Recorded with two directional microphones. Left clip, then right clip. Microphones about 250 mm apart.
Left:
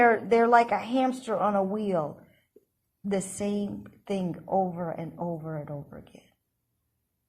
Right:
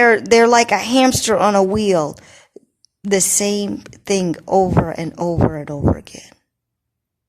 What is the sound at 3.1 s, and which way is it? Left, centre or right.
A woman's voice, right.